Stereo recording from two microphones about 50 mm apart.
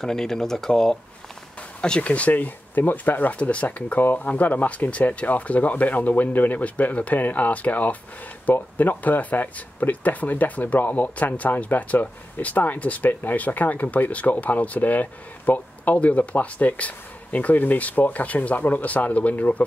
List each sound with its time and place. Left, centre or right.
0.0 s speech: centre
1.8 s speech: left
3.3 s speech: left
4.0 s speech: left